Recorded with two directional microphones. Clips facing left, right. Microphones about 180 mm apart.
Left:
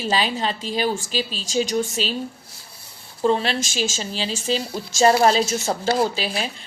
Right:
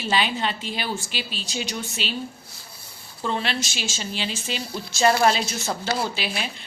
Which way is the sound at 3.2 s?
35° left (ahead or behind).